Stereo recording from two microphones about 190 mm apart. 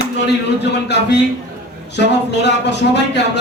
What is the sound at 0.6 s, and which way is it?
Speech, 65° left (ahead or behind).